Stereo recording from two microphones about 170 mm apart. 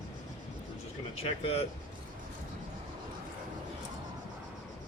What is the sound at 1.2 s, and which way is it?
Speech, 35° left (ahead or behind).